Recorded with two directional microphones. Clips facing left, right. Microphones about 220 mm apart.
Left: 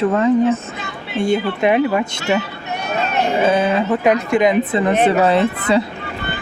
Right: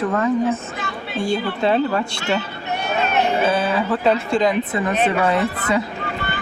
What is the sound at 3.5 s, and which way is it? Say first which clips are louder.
Speech: left 4 dB; 25° left (ahead or behind).